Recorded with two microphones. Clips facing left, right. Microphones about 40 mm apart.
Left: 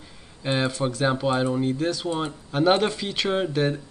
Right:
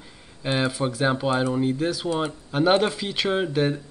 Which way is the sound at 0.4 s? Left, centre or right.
Centre.